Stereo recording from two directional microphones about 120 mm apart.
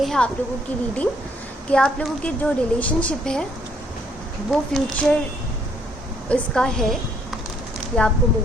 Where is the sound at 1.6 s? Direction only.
5° left (ahead or behind).